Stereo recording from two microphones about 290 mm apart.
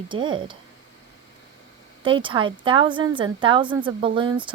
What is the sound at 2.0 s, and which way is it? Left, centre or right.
Speech, centre.